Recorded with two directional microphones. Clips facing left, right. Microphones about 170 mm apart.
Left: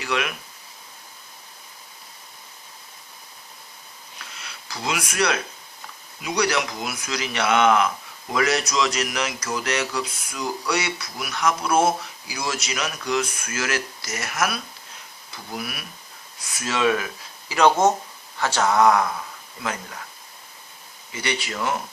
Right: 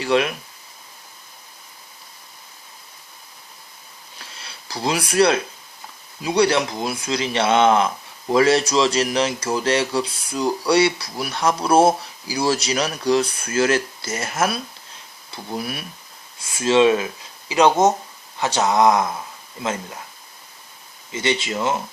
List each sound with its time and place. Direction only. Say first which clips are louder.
0.0 s speech: right 7 dB; 30° right (ahead or behind)
4.2 s a sound: even; 30° right (ahead or behind)
6.2 s speech: right 5 dB; 30° right (ahead or behind)
21.1 s speech: right 6 dB; 25° right (ahead or behind)